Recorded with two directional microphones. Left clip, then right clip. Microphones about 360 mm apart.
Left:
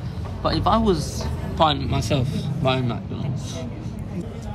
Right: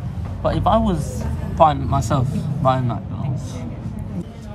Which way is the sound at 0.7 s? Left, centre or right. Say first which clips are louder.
Right 2 dB; right.